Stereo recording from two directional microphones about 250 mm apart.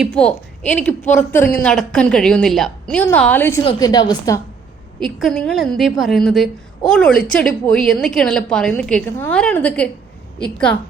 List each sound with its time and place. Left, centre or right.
0.0 s a woman's voice: centre
4.9 s a woman's voice: centre